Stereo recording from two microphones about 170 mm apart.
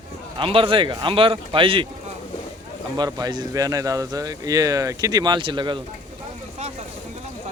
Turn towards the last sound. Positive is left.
turn(degrees=-30)  # may be behind; listen again after turning